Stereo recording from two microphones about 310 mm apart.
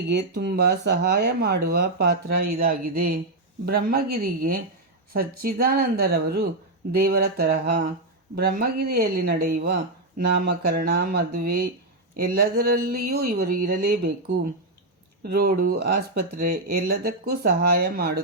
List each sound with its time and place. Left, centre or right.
0.1 s speech: right
15.2 s speech: right